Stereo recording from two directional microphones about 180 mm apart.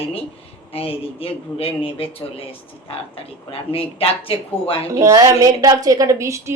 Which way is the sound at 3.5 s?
30° left (ahead or behind).